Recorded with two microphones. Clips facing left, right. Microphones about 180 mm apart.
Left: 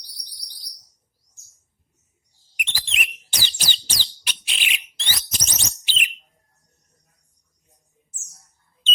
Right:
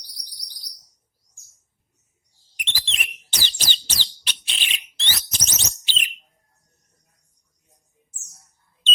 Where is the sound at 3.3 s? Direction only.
10° left (ahead or behind).